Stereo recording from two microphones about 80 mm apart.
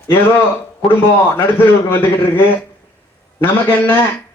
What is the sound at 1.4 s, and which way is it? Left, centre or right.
A man's voice, left.